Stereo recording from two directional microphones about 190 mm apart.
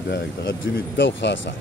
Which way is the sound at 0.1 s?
70° left (ahead or behind).